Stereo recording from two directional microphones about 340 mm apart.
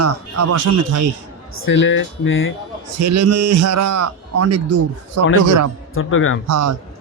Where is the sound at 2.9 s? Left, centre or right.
Right.